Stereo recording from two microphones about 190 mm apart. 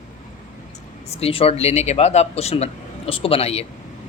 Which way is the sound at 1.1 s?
30° left (ahead or behind).